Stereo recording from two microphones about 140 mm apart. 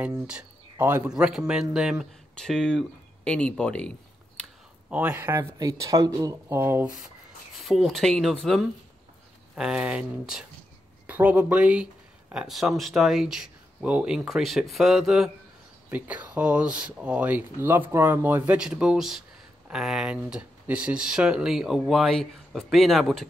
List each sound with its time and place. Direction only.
0.3 s speech: 10° right (ahead or behind); by 3.9 s 5° left (ahead or behind)
4.8 s speech: 10° right (ahead or behind)
7.5 s speech: centre (ahead or behind)